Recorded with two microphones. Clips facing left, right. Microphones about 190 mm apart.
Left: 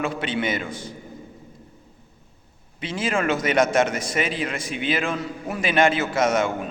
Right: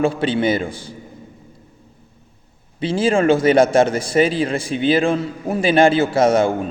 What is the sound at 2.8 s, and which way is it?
A man's voice, 30° right (ahead or behind).